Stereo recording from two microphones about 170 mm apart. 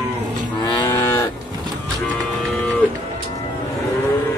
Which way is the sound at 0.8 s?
15° left (ahead or behind).